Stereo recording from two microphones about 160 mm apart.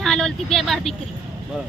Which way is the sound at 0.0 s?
5° left (ahead or behind).